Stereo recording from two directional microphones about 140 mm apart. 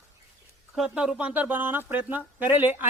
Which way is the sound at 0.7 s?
5° right (ahead or behind).